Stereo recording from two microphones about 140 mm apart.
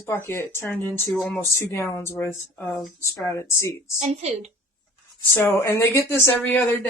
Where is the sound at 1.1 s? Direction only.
5° left (ahead or behind).